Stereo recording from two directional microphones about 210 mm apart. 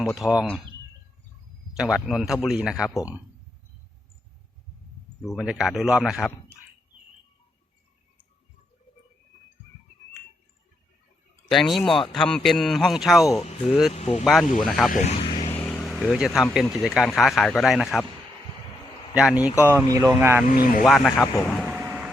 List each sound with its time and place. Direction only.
0.2 s speech: centre (ahead or behind)
1.7 s speech: 5° right (ahead or behind)
5.2 s speech: centre (ahead or behind)
11.4 s speech: centre (ahead or behind)
13.9 s speech: 30° left (ahead or behind)
14.6 s speech: centre (ahead or behind)
14.8 s speech: 40° left (ahead or behind)
15.2 s vehicle: 25° left (ahead or behind)
15.5 s vehicle: 5° left (ahead or behind)
16.8 s speech: centre (ahead or behind)
19.1 s speech: 5° right (ahead or behind)
20.5 s speech: 40° left (ahead or behind)
20.8 s speech: centre (ahead or behind)
21.7 s vehicle: 10° right (ahead or behind)